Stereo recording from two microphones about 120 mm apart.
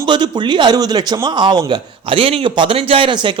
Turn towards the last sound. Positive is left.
turn(degrees=-40)  # may be behind; listen again after turning